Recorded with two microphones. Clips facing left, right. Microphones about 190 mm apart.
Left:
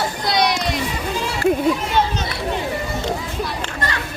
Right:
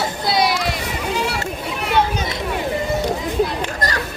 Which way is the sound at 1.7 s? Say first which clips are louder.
Right 1 dB; 65° right (ahead or behind).